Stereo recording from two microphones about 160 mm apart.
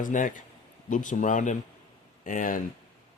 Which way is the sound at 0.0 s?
55° left (ahead or behind).